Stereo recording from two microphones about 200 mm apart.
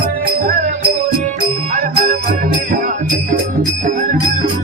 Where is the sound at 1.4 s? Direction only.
40° right (ahead or behind).